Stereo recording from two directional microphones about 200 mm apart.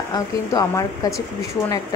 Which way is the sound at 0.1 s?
20° left (ahead or behind).